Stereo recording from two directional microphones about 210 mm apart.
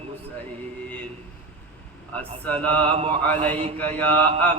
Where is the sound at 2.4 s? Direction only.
5° left (ahead or behind).